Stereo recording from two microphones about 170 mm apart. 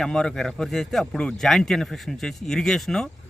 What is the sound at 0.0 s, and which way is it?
Speech, 5° left (ahead or behind).